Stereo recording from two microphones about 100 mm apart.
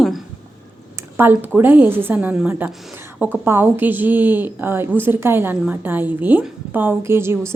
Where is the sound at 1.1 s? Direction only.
20° right (ahead or behind).